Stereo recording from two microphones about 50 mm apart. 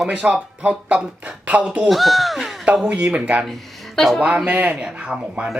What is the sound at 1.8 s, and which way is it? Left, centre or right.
Speech, centre.